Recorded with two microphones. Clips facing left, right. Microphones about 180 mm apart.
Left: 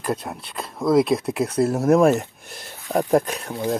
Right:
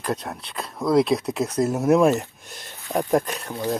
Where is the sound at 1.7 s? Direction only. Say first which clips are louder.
Left 1 dB; centre (ahead or behind).